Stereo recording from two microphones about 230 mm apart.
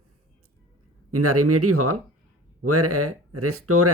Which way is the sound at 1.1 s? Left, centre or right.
Right.